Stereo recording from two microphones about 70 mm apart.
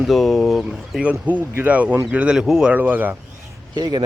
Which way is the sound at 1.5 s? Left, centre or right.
Right.